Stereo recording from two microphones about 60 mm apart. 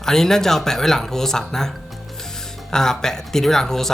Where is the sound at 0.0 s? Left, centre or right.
Centre.